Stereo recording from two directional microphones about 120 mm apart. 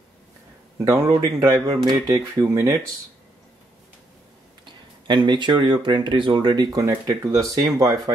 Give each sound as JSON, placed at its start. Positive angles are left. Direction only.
{"t": 0.7, "sound": "speech", "side_deg": -25}
{"t": 5.0, "sound": "speech", "side_deg": -40}